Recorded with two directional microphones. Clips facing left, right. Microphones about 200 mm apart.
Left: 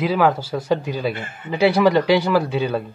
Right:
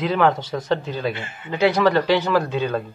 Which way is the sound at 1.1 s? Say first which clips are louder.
Left 2 dB; 50° left (ahead or behind).